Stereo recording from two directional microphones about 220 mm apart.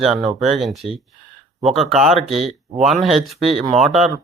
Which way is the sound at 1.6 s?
30° right (ahead or behind).